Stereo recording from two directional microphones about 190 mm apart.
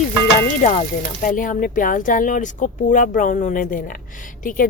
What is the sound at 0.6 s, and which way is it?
A woman's voice, 40° left (ahead or behind).